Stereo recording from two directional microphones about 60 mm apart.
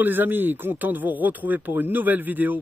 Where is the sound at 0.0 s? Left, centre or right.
Right.